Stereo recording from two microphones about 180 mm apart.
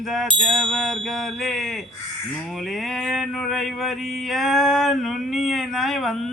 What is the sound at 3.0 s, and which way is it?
Speech, centre (ahead or behind).